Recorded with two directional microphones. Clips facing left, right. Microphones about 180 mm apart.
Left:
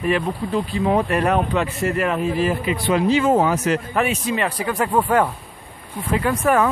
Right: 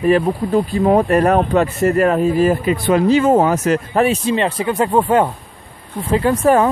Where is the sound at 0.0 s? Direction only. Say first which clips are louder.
Right 7 dB; 40° right (ahead or behind).